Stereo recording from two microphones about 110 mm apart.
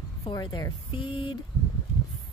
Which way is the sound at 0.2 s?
40° left (ahead or behind).